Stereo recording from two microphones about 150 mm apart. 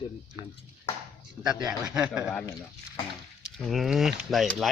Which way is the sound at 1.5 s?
5° right (ahead or behind).